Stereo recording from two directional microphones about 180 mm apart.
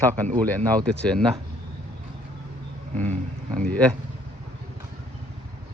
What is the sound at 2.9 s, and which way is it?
Speech, 40° right (ahead or behind).